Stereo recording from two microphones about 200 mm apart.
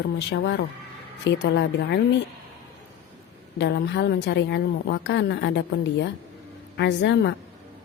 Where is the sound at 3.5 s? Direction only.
60° left (ahead or behind).